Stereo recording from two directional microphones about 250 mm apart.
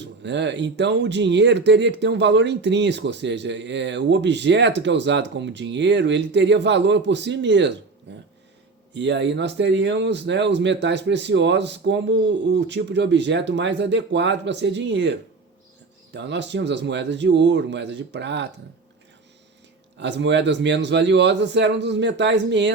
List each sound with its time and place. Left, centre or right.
0.2 s speech: right
16.1 s speech: right
20.0 s speech: right